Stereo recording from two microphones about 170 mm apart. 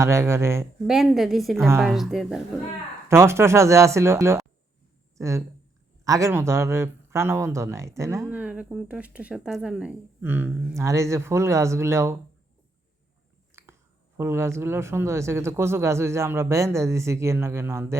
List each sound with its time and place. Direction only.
0.0 s speech: 15° right (ahead or behind)
0.9 s a woman's voice: centre (ahead or behind)
3.1 s speech: 15° right (ahead or behind)
13.5 s biting: 15° right (ahead or behind)
14.2 s speech: 15° right (ahead or behind)